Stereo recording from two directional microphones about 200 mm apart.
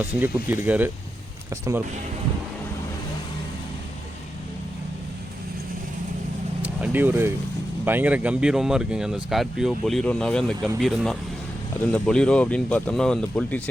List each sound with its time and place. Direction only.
0.0 s speech: 10° right (ahead or behind)
6.6 s vehicle: 10° right (ahead or behind)
7.9 s speech: 10° right (ahead or behind)